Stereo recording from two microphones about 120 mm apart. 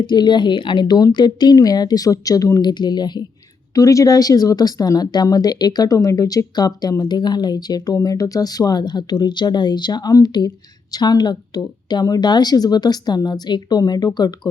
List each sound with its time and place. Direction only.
0.0 s speech: 40° left (ahead or behind)